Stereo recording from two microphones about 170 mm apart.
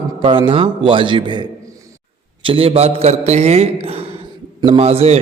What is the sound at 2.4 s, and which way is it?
A man's voice, 30° right (ahead or behind).